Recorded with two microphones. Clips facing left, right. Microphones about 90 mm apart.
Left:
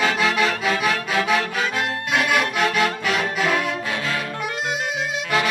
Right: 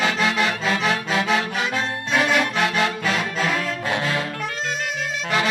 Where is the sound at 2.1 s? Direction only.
25° right (ahead or behind).